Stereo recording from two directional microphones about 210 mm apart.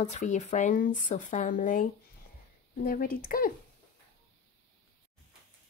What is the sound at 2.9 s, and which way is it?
Speech, 45° left (ahead or behind).